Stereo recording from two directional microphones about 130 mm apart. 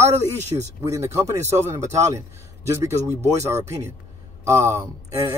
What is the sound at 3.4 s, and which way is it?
Speech, 20° right (ahead or behind).